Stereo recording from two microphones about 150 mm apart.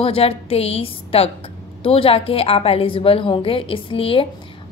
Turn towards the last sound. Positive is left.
turn(degrees=35)  # may be behind; listen again after turning